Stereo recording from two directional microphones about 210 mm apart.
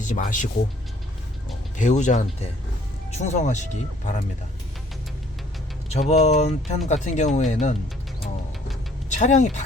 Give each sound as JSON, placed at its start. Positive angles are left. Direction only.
{"t": 0.0, "sound": "speech", "side_deg": 40}
{"t": 1.7, "sound": "speech", "side_deg": 35}
{"t": 5.9, "sound": "speech", "side_deg": 30}
{"t": 9.0, "sound": "speech", "side_deg": 35}